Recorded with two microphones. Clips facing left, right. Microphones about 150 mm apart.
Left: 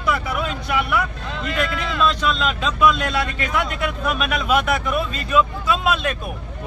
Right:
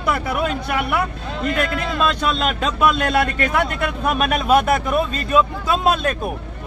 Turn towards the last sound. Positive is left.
turn(degrees=-40)  # may be behind; listen again after turning